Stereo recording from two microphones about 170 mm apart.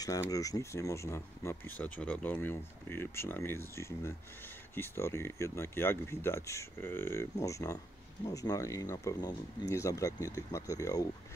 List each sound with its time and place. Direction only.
0.0 s speech: 20° left (ahead or behind)